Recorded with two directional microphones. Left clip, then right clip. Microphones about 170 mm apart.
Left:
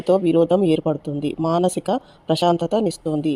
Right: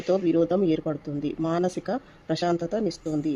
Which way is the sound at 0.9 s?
10° left (ahead or behind).